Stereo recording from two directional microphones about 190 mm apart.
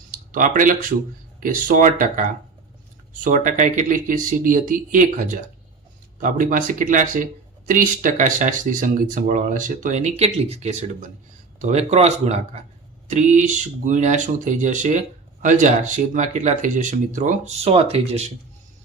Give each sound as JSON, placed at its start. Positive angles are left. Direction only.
{"t": 0.1, "sound": "speech", "side_deg": -45}